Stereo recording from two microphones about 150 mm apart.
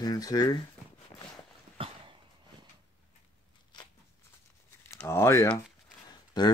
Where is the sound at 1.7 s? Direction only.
35° right (ahead or behind).